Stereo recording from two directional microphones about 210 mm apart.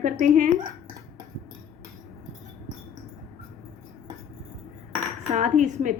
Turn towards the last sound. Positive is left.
turn(degrees=-35)  # may be behind; listen again after turning